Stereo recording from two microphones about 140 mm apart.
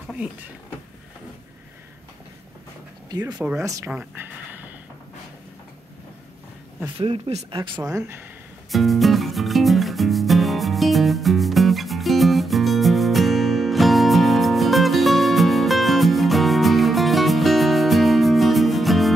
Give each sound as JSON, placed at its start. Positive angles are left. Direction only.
{"t": 3.1, "sound": "speech", "side_deg": -30}
{"t": 3.3, "sound": "speech", "side_deg": -10}
{"t": 3.6, "sound": "speech", "side_deg": -25}
{"t": 3.9, "sound": "a sound", "side_deg": -10}
{"t": 7.0, "sound": "speech", "side_deg": -45}
{"t": 8.7, "sound": "music", "side_deg": 0}